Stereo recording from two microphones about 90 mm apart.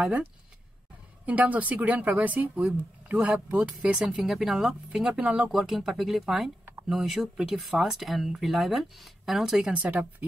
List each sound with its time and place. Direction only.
0.0 s speech: 15° right (ahead or behind)